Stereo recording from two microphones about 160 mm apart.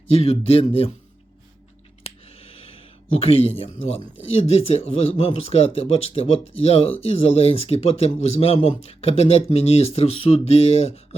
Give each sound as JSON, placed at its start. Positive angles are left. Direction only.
{"t": 0.1, "sound": "speech", "side_deg": 40}
{"t": 2.0, "sound": "speech", "side_deg": 40}